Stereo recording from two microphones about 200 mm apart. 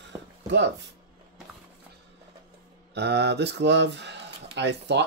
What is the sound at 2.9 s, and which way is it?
Speech, 55° right (ahead or behind).